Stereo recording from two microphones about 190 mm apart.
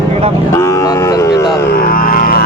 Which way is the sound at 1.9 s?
50° left (ahead or behind).